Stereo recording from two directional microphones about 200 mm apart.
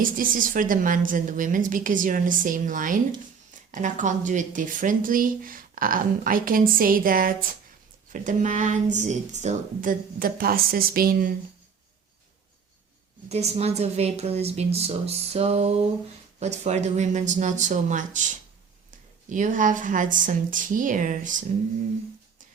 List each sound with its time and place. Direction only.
0.0 s a woman's voice: 45° right (ahead or behind)
13.2 s a woman's voice: 30° right (ahead or behind)